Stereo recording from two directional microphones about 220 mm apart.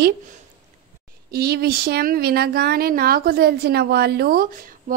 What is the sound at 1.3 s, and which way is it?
Speech, 45° right (ahead or behind).